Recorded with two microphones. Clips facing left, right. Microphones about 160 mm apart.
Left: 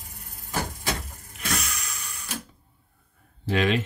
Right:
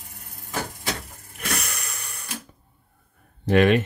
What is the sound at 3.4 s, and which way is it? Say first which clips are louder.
Speech: right 6 dB; 55° right (ahead or behind).